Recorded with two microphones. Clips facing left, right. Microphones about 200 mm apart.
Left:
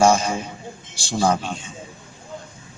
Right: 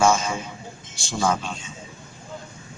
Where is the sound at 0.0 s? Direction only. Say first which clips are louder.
Left 3 dB; 35° left (ahead or behind).